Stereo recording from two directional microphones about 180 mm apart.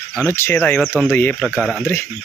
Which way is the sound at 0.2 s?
15° left (ahead or behind).